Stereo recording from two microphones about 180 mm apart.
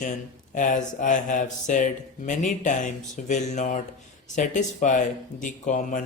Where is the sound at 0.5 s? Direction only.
45° left (ahead or behind).